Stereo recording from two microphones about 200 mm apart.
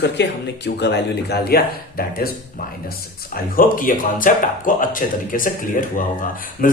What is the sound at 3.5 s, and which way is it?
A man's voice, 45° left (ahead or behind).